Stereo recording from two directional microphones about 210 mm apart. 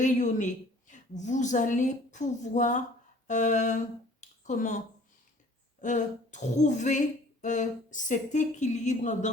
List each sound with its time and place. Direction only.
0.0 s speech: 35° left (ahead or behind)
5.8 s speech: 35° left (ahead or behind)